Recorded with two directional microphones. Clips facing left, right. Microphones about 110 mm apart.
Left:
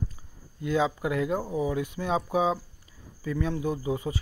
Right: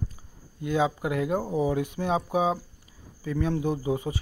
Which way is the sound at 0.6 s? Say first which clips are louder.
Right 1 dB; 20° right (ahead or behind).